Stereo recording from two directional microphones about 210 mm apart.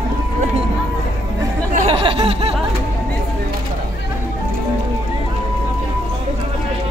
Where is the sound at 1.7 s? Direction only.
25° right (ahead or behind).